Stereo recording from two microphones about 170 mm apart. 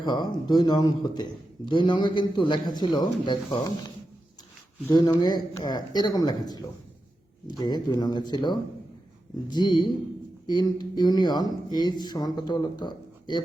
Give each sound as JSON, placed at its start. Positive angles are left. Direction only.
{"t": 0.0, "sound": "a man's voice", "side_deg": 25}
{"t": 4.9, "sound": "a man's voice", "side_deg": 25}